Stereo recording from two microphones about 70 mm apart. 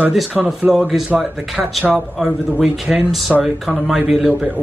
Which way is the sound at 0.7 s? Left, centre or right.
Centre.